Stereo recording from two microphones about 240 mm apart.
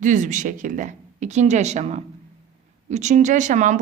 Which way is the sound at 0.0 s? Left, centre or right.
Right.